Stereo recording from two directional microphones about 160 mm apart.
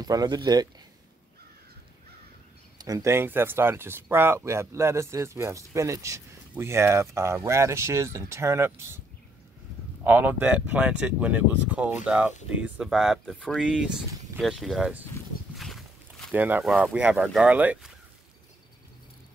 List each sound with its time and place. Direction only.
0.0 s speech: 25° right (ahead or behind)
2.8 s speech: 20° right (ahead or behind)
10.0 s speech: 10° right (ahead or behind)
15.5 s walk: centre (ahead or behind)
16.3 s speech: 10° right (ahead or behind)